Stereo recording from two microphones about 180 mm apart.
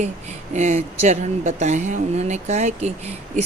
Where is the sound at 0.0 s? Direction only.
40° right (ahead or behind).